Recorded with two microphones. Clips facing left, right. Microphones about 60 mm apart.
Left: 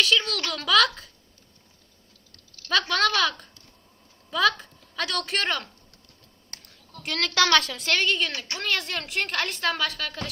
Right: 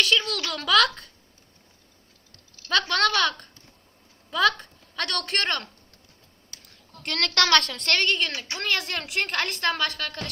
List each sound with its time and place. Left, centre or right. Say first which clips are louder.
0.0 s a woman's voice: even; centre
2.6 s a woman's voice: even; centre
6.5 s a sound: left 3 dB; left
7.0 s a woman's voice: left 1 dB; centre